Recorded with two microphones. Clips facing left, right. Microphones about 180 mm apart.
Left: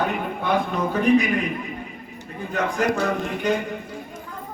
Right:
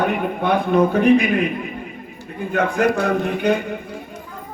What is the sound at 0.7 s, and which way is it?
Speech, 60° right (ahead or behind).